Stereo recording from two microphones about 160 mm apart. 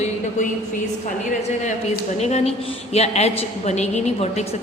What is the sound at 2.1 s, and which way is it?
A woman's voice, 45° left (ahead or behind).